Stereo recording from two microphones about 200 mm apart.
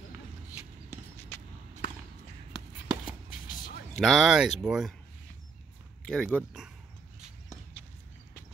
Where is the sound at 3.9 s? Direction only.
Centre (ahead or behind).